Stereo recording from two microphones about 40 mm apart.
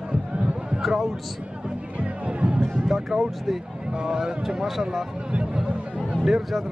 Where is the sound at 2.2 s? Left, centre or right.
Right.